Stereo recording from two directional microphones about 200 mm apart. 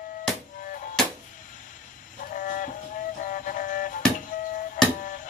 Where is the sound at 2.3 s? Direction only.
40° left (ahead or behind).